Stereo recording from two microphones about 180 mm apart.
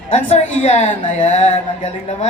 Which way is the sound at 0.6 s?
35° left (ahead or behind).